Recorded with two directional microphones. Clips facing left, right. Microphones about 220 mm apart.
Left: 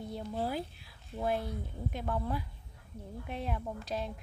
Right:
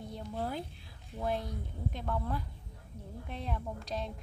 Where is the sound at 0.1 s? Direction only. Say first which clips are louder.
Left 2 dB; 10° left (ahead or behind).